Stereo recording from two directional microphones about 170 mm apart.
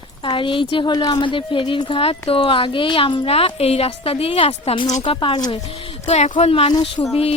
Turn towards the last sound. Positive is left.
turn(degrees=25)  # may be behind; listen again after turning